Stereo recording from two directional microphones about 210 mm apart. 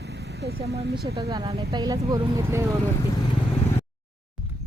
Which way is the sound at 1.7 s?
15° right (ahead or behind).